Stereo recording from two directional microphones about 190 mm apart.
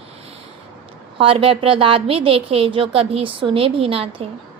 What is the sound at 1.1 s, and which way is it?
A woman's voice, 25° right (ahead or behind).